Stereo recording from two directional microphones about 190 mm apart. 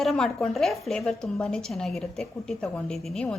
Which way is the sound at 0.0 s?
Centre (ahead or behind).